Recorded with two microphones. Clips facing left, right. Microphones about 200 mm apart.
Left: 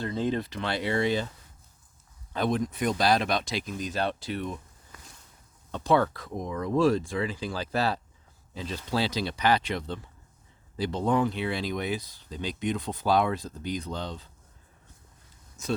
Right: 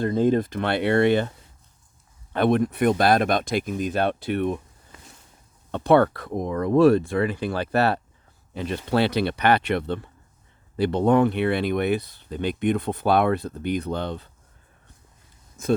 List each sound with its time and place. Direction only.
0.0 s speech: 50° right (ahead or behind)
2.3 s speech: 60° right (ahead or behind)
5.7 s speech: 60° right (ahead or behind)
15.6 s speech: 55° right (ahead or behind)